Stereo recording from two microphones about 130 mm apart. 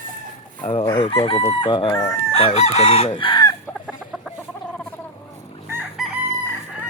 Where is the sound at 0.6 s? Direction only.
45° left (ahead or behind).